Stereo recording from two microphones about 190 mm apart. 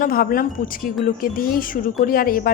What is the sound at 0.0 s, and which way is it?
Speech, 50° left (ahead or behind).